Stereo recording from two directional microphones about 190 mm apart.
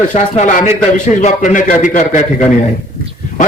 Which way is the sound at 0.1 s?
40° left (ahead or behind).